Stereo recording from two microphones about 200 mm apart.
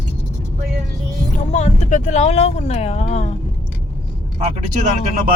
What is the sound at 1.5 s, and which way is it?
Speech, 35° left (ahead or behind).